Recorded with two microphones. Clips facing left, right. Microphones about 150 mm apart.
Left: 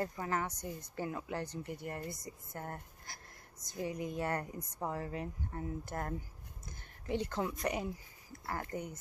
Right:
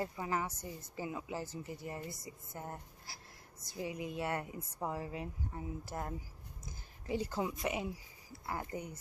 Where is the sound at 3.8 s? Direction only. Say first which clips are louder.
Left 2 dB; 35° left (ahead or behind).